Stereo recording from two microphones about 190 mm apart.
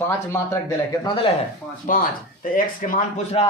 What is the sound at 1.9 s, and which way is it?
Speech, 45° left (ahead or behind).